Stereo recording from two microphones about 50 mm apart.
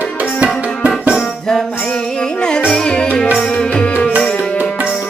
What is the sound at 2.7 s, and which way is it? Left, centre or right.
Music, centre.